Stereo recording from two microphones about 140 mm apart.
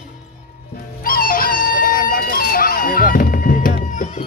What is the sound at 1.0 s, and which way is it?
Music, 90° left.